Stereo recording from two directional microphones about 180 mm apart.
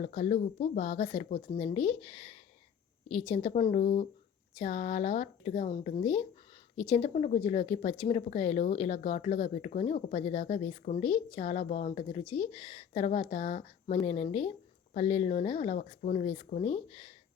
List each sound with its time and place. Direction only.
0.0 s speech: 35° left (ahead or behind)